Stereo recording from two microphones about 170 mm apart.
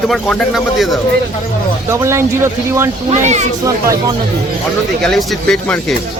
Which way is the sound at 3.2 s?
45° right (ahead or behind).